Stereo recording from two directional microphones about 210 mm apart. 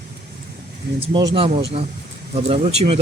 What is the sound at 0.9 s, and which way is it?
Speech, 25° right (ahead or behind).